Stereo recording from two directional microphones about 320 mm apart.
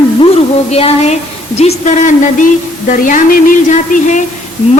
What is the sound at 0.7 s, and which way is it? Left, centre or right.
A woman's voice, centre.